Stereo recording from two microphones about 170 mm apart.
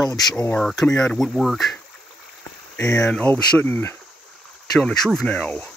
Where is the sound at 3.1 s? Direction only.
5° left (ahead or behind).